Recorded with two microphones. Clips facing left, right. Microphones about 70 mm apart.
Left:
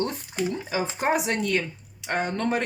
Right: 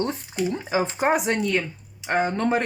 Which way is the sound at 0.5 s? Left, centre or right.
Right.